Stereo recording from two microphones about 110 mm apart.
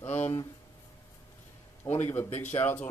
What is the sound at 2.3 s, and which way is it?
Speech, 90° left.